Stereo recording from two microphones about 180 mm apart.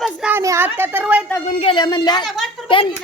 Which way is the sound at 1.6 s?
25° left (ahead or behind).